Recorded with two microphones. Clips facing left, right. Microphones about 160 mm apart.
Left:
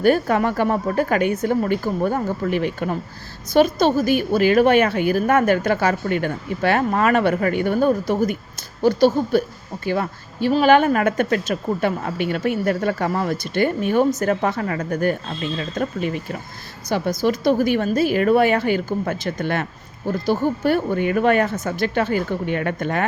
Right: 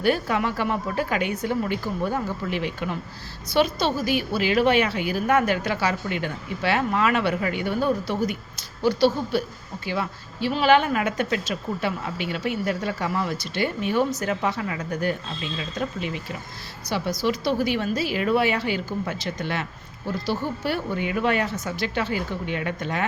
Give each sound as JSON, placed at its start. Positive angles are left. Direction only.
{"t": 0.0, "sound": "a woman's voice", "side_deg": 45}